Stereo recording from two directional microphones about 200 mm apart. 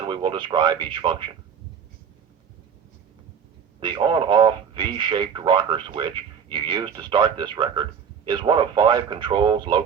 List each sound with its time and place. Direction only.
0.1 s speech: 25° right (ahead or behind)
3.8 s speech: 25° right (ahead or behind)